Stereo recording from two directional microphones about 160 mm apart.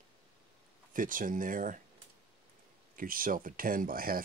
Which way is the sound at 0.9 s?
55° right (ahead or behind).